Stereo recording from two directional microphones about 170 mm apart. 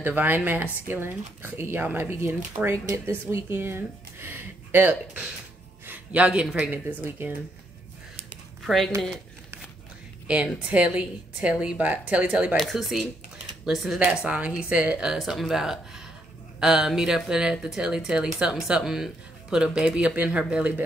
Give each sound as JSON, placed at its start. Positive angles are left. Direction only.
{"t": 0.0, "sound": "speech", "side_deg": -10}
{"t": 8.6, "sound": "speech", "side_deg": 0}
{"t": 10.2, "sound": "speech", "side_deg": -5}